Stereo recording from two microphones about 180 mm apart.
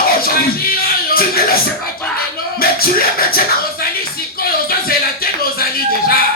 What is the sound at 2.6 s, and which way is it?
Music, 55° left (ahead or behind).